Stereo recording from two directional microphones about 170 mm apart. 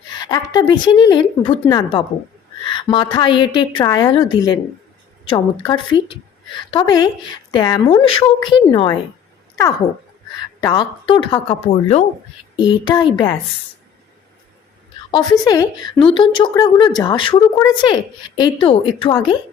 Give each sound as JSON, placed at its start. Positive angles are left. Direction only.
{"t": 0.1, "sound": "a woman's voice", "side_deg": 25}
{"t": 2.6, "sound": "speech", "side_deg": 30}
{"t": 10.6, "sound": "a woman's voice", "side_deg": 25}
{"t": 12.5, "sound": "speech", "side_deg": 25}
{"t": 15.1, "sound": "speech", "side_deg": 25}